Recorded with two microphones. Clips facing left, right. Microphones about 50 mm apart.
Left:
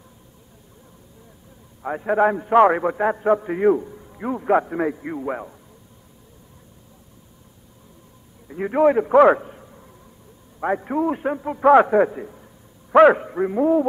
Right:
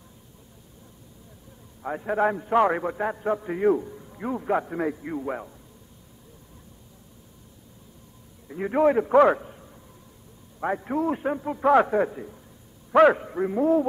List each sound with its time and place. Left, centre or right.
1.8 s a man's voice: centre
8.5 s a man's voice: centre